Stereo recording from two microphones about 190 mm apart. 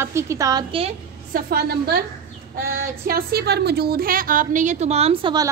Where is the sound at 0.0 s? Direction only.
15° right (ahead or behind).